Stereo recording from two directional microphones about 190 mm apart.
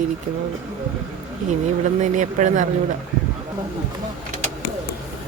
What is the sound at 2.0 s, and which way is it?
Speech, 40° right (ahead or behind).